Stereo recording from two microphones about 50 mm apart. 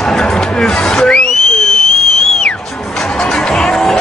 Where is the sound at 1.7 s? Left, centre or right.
Centre.